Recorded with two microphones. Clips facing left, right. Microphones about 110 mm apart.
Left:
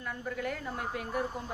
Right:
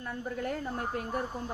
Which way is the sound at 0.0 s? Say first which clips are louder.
Right 1 dB; 35° right (ahead or behind).